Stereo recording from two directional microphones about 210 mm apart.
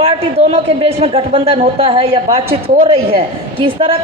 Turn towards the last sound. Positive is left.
turn(degrees=-25)  # may be behind; listen again after turning